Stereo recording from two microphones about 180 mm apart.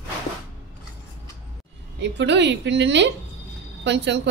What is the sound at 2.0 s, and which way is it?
A woman's voice, 75° right (ahead or behind).